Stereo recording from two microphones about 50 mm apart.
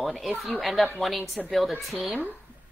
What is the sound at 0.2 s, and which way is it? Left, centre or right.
A woman's voice, centre.